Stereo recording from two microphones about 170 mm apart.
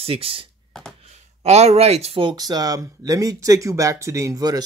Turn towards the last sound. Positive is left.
turn(degrees=-20)  # may be behind; listen again after turning